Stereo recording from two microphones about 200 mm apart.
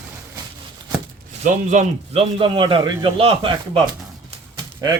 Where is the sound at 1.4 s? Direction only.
35° right (ahead or behind).